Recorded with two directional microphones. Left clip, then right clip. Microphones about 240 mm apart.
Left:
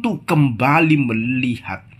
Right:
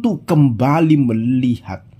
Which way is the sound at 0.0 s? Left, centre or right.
Right.